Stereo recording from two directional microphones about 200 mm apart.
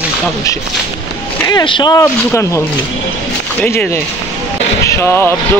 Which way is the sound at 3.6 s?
5° left (ahead or behind).